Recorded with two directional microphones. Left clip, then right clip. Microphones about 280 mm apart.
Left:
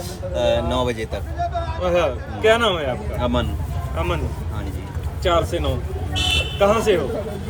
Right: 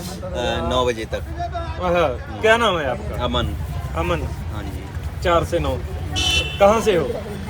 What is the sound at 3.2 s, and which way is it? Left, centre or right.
Speech, centre.